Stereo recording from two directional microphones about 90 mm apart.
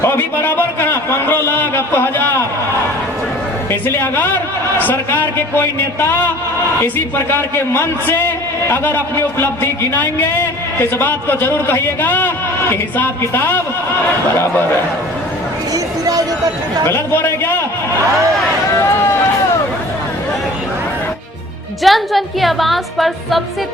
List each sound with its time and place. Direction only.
0.0 s a sound: 25° left (ahead or behind)
3.7 s a man's voice: 25° left (ahead or behind)
15.7 s a sound: 40° right (ahead or behind)
16.8 s a man's voice: 25° left (ahead or behind)
18.8 s speech: 30° left (ahead or behind)
21.8 s a woman's voice: centre (ahead or behind)